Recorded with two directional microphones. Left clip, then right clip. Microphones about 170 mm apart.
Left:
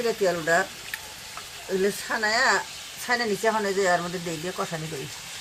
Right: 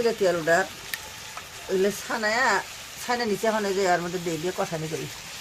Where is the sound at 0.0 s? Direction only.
40° right (ahead or behind).